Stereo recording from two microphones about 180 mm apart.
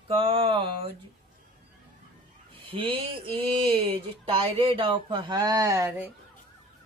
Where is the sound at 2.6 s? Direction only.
30° right (ahead or behind); by 6.1 s 10° right (ahead or behind).